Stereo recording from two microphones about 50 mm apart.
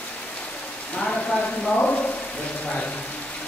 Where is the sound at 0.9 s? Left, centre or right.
Centre.